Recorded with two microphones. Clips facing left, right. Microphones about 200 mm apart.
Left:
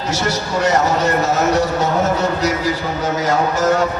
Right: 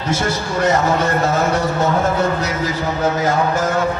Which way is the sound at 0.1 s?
55° right (ahead or behind).